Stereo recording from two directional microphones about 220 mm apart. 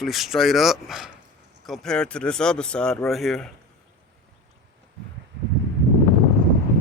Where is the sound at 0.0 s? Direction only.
Centre (ahead or behind).